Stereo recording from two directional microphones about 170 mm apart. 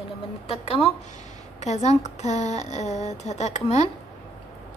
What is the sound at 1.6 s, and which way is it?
Speech, 40° left (ahead or behind).